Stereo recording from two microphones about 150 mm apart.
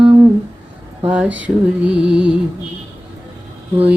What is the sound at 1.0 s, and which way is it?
Mantra, 10° right (ahead or behind).